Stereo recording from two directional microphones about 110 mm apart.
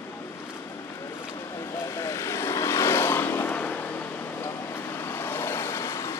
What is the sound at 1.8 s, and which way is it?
Vehicle, 25° left (ahead or behind).